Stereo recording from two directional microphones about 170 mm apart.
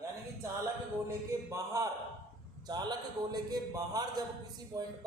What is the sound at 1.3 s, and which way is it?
A man's voice, 20° right (ahead or behind).